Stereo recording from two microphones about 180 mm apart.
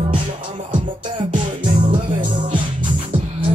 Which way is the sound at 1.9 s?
45° right (ahead or behind).